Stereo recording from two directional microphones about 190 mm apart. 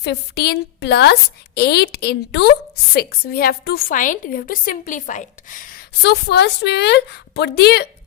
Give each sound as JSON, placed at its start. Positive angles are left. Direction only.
{"t": 0.0, "sound": "a woman's voice", "side_deg": 60}